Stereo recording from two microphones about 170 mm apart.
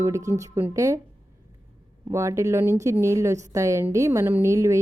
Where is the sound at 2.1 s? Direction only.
15° right (ahead or behind).